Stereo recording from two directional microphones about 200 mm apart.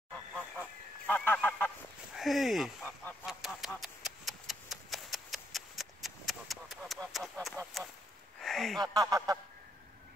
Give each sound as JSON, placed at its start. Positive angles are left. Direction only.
{"t": 0.1, "sound": "goose", "side_deg": 5}
{"t": 2.1, "sound": "speech", "side_deg": 0}
{"t": 3.3, "sound": "a sound", "side_deg": 0}
{"t": 8.9, "sound": "honk", "side_deg": -20}